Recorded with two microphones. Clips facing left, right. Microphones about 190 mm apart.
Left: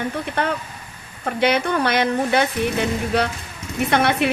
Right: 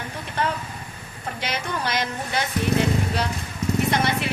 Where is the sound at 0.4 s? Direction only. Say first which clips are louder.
Right 1 dB; 60° left (ahead or behind).